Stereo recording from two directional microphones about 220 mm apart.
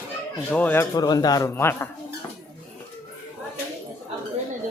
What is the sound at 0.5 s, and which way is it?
A man's voice, 10° left (ahead or behind).